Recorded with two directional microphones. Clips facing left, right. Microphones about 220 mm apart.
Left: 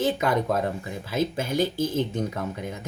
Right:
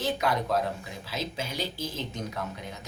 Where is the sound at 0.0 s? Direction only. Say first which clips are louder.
Left 5 dB; 50° left (ahead or behind).